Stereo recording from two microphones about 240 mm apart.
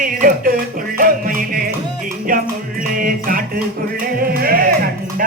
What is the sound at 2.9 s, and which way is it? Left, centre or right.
Music, right.